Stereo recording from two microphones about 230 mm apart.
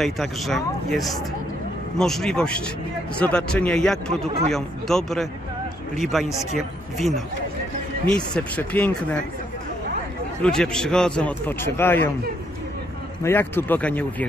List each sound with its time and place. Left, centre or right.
0.0 s a man's voice: centre
8.4 s a man's voice: centre
10.4 s a man's voice: centre
13.2 s speech: centre